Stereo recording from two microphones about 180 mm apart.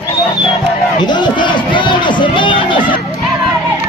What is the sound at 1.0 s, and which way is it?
Crowd, 25° left (ahead or behind).